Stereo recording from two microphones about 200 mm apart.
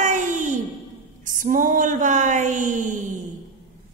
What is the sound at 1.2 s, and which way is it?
Speech, 40° right (ahead or behind).